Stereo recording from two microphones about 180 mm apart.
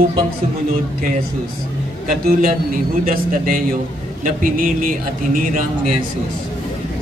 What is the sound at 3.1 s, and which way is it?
A man's voice, 50° right (ahead or behind).